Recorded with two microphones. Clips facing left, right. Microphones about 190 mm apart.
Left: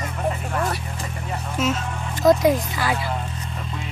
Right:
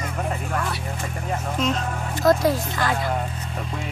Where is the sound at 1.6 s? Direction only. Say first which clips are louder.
Left 2 dB; 5° left (ahead or behind).